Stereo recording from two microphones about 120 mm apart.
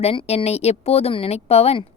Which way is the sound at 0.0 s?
55° left (ahead or behind).